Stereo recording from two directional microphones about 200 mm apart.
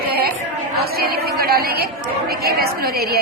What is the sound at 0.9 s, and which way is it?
A woman's voice, 50° right (ahead or behind).